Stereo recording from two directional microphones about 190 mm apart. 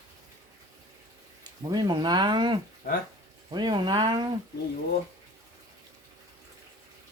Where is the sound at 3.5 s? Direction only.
20° right (ahead or behind).